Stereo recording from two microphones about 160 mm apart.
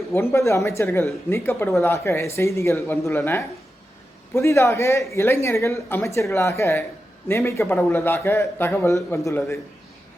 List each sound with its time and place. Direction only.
0.1 s a man's voice: 15° left (ahead or behind)